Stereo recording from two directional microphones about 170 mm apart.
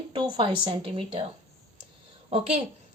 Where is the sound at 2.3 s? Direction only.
35° right (ahead or behind).